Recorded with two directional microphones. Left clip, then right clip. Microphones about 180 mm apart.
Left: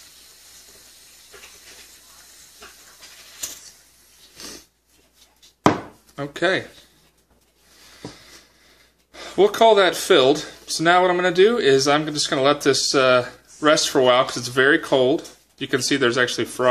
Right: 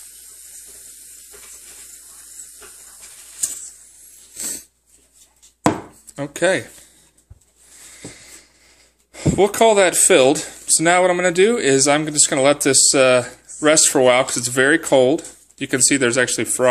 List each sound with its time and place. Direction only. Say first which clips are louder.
4.4 s a sound: right 7 dB; 40° right (ahead or behind)
6.1 s speech: right 3 dB; 45° right (ahead or behind)
9.1 s speech: right 1 dB; 40° right (ahead or behind)